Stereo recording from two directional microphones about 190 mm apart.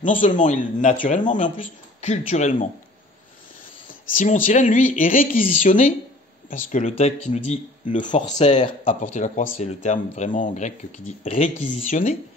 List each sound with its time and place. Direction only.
0.2 s speech: 40° left (ahead or behind)
4.1 s speech: 40° left (ahead or behind)